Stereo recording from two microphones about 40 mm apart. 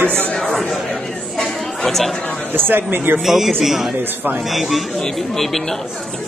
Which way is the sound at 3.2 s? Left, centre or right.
Centre.